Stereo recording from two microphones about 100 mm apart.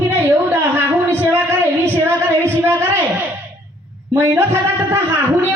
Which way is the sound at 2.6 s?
25° right (ahead or behind).